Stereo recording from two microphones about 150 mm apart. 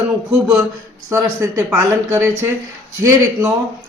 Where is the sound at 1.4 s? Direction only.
20° right (ahead or behind).